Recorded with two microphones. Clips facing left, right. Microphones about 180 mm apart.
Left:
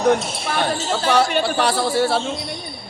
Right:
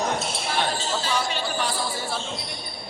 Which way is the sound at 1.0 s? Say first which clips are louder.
Left 9 dB; 70° left (ahead or behind).